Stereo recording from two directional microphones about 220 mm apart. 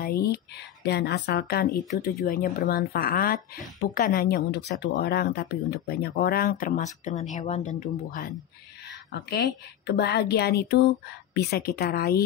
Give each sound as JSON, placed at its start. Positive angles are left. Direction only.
{"t": 0.0, "sound": "speech", "side_deg": 45}
{"t": 9.8, "sound": "speech", "side_deg": 50}